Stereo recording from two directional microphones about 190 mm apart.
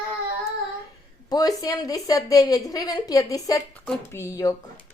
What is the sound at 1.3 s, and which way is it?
A woman's voice, 20° left (ahead or behind).